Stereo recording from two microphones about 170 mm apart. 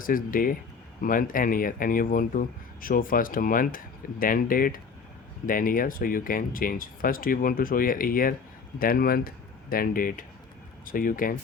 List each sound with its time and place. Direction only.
0.0 s speech: 55° left (ahead or behind)